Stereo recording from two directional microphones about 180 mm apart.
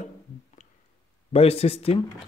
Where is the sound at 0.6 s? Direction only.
40° left (ahead or behind).